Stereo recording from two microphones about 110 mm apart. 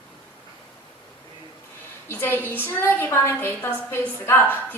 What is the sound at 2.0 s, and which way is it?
A woman's voice, 20° left (ahead or behind).